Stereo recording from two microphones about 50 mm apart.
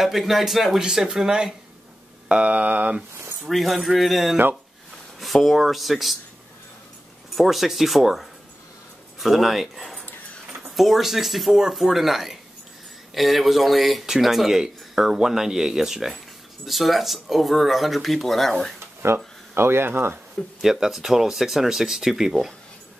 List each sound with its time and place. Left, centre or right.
0.0 s speech: centre
0.7 s speech: centre
2.2 s mantra: right
3.4 s speech: centre
7.3 s speech: centre
19.0 s speech: right
20.6 s speech: centre